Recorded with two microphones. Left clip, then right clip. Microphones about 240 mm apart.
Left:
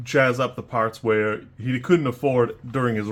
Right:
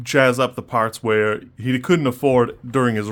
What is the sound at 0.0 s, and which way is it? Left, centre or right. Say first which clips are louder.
Speech: right 4 dB; right.